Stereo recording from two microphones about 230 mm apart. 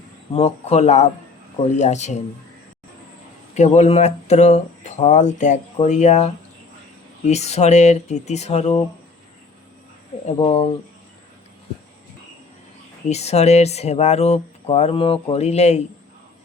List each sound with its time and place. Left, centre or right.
0.3 s speech: left
3.5 s speech: left
10.3 s speech: left
13.1 s speech: left